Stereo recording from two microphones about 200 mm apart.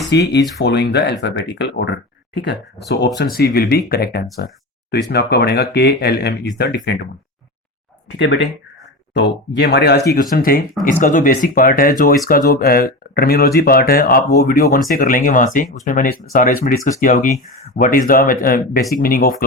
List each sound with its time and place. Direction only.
0.1 s speech: 60° left (ahead or behind)
8.2 s speech: 65° left (ahead or behind)
10.1 s speech: 45° left (ahead or behind)